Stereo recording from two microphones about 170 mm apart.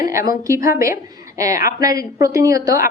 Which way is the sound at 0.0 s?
20° right (ahead or behind).